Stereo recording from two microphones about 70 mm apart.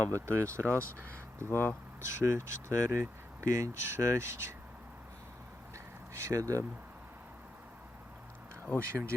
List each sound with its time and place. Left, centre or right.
0.1 s speech: right
1.5 s speech: left
2.0 s speech: right
5.7 s a sound: right
8.9 s speech: right